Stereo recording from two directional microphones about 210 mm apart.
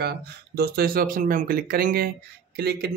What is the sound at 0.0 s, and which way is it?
Speech, 50° right (ahead or behind).